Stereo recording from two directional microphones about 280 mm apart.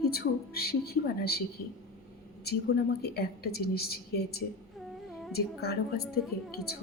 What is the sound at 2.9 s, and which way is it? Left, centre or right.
A woman's voice, left.